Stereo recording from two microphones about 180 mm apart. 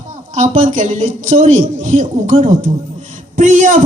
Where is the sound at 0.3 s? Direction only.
40° right (ahead or behind).